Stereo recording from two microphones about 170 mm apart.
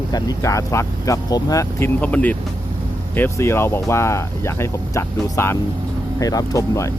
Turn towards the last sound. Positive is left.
turn(degrees=20)  # may be behind; listen again after turning